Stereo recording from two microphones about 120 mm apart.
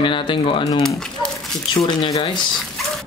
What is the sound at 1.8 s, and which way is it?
Speech, 35° left (ahead or behind).